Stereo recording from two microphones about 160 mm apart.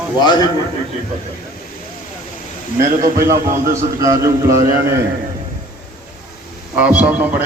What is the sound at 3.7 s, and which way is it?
A man's voice, 20° right (ahead or behind).